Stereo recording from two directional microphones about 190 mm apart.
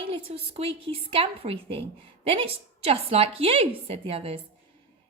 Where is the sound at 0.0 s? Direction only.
30° right (ahead or behind).